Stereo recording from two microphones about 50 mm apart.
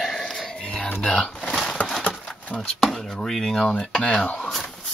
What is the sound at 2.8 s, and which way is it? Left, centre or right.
Speech, centre.